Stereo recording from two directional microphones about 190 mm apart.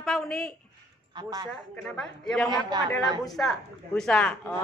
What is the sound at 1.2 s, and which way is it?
Speech, 20° right (ahead or behind).